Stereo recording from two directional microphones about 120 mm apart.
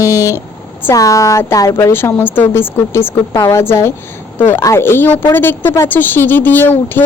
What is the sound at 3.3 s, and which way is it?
Speech, 30° left (ahead or behind).